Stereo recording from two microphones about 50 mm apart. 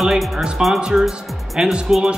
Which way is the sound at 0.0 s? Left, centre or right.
Centre.